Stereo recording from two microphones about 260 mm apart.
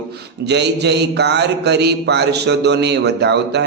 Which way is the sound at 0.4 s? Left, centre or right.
Right.